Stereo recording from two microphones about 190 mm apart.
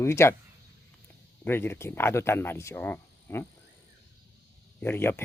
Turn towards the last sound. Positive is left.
turn(degrees=10)  # may be behind; listen again after turning